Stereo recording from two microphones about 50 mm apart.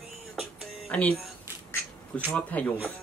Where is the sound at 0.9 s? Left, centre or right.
Left.